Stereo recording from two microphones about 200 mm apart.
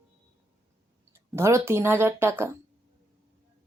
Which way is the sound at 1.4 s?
15° right (ahead or behind).